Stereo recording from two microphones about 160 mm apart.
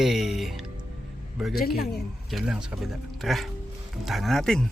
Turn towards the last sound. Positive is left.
turn(degrees=0)  # may be behind; listen again after turning